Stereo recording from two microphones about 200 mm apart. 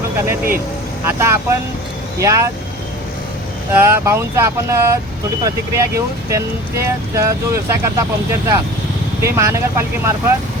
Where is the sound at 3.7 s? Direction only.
15° right (ahead or behind).